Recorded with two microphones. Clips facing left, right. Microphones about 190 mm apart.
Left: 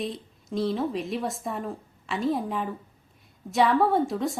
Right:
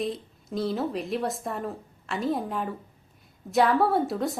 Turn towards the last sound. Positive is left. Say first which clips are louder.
# left 1 dB
turn(degrees=0)  # may be behind; listen again after turning